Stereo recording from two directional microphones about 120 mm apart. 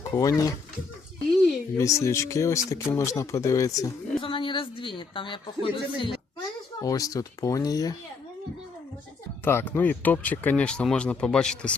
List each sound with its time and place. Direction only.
0.1 s speech: 30° left (ahead or behind)
1.8 s speech: 25° left (ahead or behind)
4.2 s a woman's voice: 45° left (ahead or behind)
6.8 s speech: 30° left (ahead or behind)
9.4 s speech: 20° left (ahead or behind)